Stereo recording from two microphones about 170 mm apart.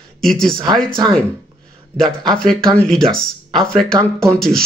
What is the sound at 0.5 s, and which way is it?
Speech, 25° right (ahead or behind).